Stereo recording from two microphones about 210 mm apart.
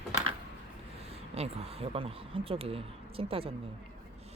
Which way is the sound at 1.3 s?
30° right (ahead or behind).